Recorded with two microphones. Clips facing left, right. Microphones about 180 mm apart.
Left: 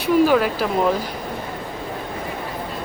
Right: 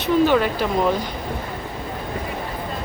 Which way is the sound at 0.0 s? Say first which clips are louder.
Left 1 dB; 5° left (ahead or behind).